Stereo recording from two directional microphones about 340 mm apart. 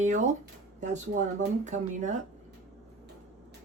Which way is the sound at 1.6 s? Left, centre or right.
Right.